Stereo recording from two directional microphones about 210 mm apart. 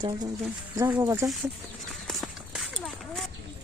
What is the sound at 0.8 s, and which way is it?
Speech, 10° right (ahead or behind).